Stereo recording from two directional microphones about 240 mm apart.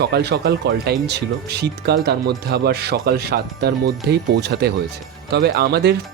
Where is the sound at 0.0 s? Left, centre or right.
Right.